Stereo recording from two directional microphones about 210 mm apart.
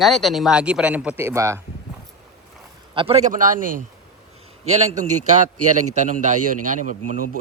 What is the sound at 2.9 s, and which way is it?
A man's voice, 25° right (ahead or behind).